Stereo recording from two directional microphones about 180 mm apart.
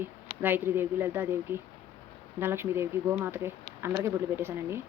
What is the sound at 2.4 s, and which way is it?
Speech, 10° right (ahead or behind).